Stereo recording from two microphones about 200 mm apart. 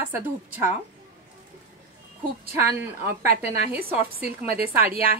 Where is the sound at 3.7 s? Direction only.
50° right (ahead or behind).